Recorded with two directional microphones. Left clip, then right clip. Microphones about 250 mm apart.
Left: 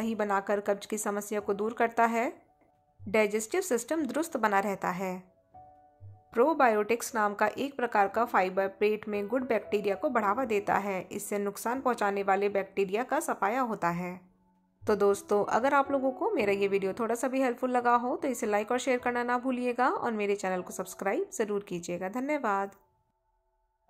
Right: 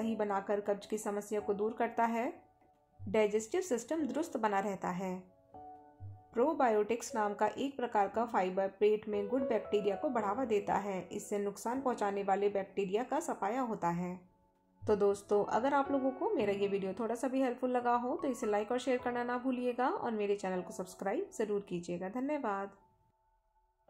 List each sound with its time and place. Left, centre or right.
0.0 s a woman's voice: centre
6.3 s a woman's voice: centre